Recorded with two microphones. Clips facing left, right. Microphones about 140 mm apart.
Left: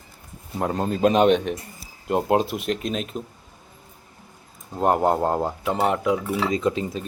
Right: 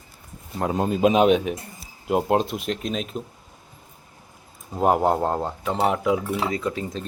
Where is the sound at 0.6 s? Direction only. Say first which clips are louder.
Right 1 dB; 5° right (ahead or behind).